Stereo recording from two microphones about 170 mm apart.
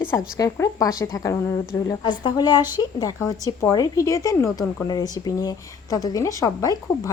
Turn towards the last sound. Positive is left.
turn(degrees=20)  # may be behind; listen again after turning